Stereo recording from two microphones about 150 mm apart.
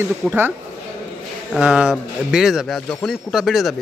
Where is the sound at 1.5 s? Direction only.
5° right (ahead or behind).